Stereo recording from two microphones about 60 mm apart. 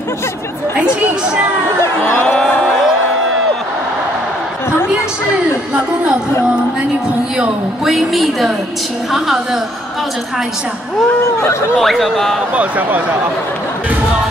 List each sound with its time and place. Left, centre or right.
2.2 s a sound: centre
7.8 s a woman's voice: centre
11.8 s a woman's voice: centre
12.5 s speech: right